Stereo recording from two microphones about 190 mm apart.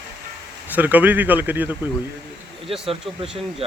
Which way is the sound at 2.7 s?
30° right (ahead or behind).